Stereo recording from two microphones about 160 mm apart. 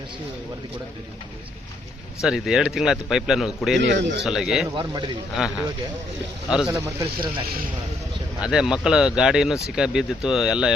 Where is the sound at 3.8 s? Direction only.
90° right.